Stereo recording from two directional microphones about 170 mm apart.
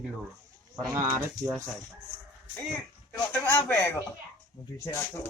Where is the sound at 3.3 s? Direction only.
10° left (ahead or behind).